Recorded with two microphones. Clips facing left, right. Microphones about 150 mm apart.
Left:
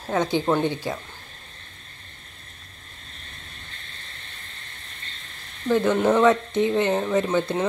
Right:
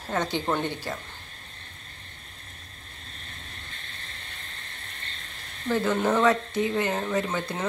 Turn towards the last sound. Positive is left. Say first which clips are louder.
# left 6 dB
turn(degrees=20)  # may be behind; listen again after turning